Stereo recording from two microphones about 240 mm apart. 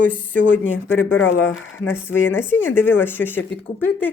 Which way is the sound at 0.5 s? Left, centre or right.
Centre.